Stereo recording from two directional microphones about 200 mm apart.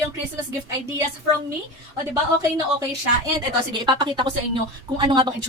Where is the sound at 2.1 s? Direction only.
15° right (ahead or behind).